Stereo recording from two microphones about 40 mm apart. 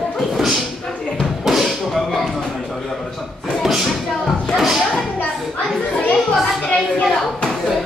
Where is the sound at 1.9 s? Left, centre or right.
Centre.